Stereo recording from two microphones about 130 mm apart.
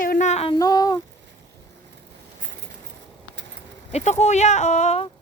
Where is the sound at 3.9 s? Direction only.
60° left (ahead or behind).